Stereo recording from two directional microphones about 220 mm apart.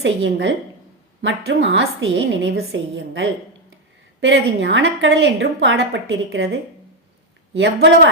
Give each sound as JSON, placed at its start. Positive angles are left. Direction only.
{"t": 0.0, "sound": "a woman's voice", "side_deg": -55}